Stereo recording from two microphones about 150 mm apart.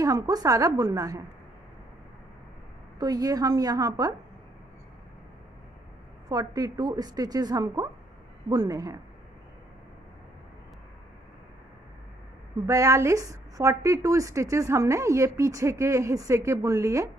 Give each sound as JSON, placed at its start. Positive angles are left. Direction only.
{"t": 0.0, "sound": "a woman's voice", "side_deg": -25}
{"t": 3.0, "sound": "a woman's voice", "side_deg": -25}
{"t": 6.2, "sound": "a woman's voice", "side_deg": -25}
{"t": 12.6, "sound": "a woman's voice", "side_deg": -20}